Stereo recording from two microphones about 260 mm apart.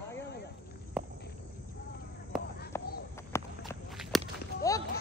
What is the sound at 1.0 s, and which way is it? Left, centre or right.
Cricket, centre.